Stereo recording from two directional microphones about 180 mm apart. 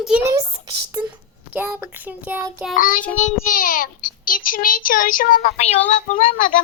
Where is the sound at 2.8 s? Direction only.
50° left (ahead or behind).